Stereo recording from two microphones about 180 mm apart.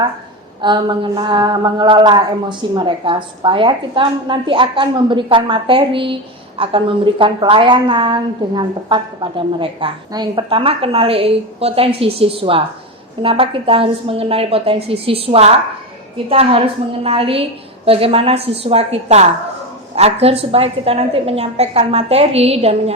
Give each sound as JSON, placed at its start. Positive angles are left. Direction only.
{"t": 0.6, "sound": "a woman's voice", "side_deg": -25}